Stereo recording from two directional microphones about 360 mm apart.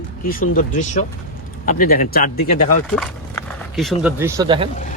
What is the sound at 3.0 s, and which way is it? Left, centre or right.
Speech, centre.